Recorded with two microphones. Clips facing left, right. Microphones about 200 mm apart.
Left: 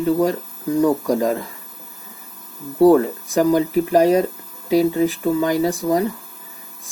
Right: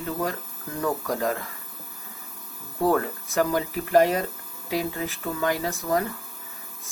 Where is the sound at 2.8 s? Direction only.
15° left (ahead or behind).